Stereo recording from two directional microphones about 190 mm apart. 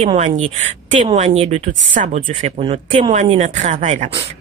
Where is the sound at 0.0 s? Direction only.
35° right (ahead or behind).